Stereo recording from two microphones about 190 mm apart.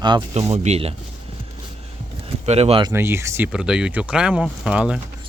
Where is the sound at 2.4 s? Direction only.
35° right (ahead or behind).